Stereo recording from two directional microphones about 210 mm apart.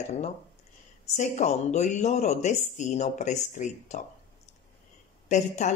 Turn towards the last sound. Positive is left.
turn(degrees=35)  # may be behind; listen again after turning